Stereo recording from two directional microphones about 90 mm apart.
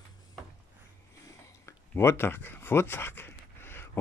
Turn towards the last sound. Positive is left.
turn(degrees=25)  # may be behind; listen again after turning